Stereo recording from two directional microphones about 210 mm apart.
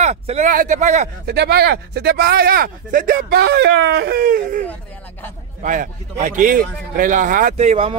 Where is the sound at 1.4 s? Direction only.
50° right (ahead or behind).